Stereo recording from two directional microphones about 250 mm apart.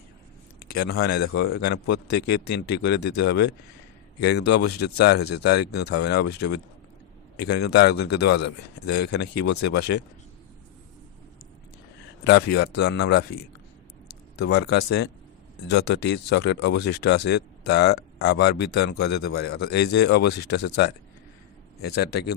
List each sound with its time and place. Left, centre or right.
0.7 s speech: left
12.2 s speech: left
21.9 s speech: left